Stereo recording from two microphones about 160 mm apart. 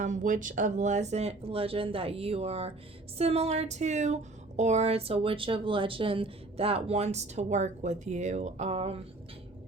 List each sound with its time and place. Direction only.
0.0 s speech: 50° right (ahead or behind)